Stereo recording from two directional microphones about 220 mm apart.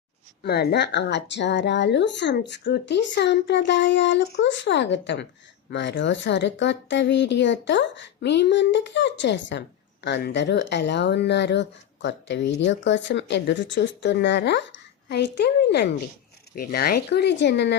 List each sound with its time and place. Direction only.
0.4 s a woman's voice: 50° left (ahead or behind)